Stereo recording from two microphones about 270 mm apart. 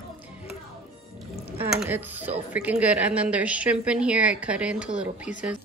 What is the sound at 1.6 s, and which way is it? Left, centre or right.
Dishes, centre.